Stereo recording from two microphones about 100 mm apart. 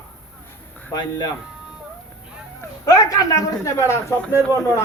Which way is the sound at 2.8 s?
35° left (ahead or behind).